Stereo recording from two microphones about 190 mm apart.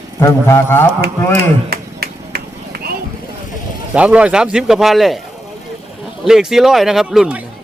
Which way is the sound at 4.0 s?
5° right (ahead or behind).